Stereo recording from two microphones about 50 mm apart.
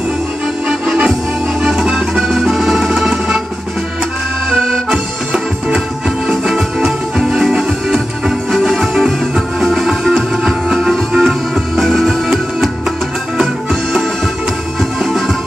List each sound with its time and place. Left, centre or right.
1.6 s music: centre
4.6 s accordion: centre
4.8 s accordion: centre
6.2 s music: centre